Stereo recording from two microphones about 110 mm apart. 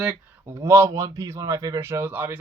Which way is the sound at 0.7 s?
25° right (ahead or behind).